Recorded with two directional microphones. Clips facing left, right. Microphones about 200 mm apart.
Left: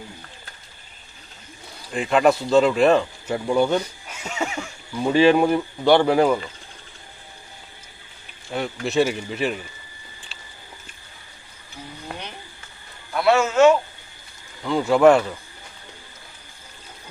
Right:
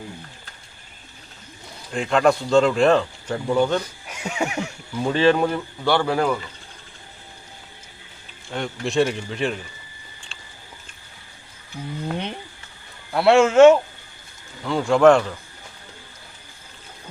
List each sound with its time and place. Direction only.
1.9 s speech: 5° left (ahead or behind)
4.1 s neigh: 15° right (ahead or behind)
5.1 s a man's voice: 10° left (ahead or behind)
8.5 s speech: 5° left (ahead or behind)
10.3 s biting: 5° left (ahead or behind)
13.1 s a man's voice: 30° right (ahead or behind)
14.6 s speech: centre (ahead or behind)